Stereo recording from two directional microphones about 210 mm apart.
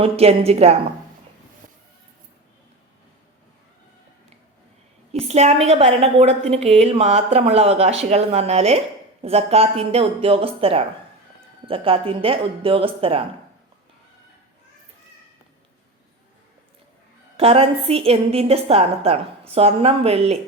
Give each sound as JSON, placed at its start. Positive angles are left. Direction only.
{"t": 0.0, "sound": "a woman's voice", "side_deg": -30}
{"t": 5.3, "sound": "a woman's voice", "side_deg": -30}
{"t": 17.3, "sound": "a woman's voice", "side_deg": -25}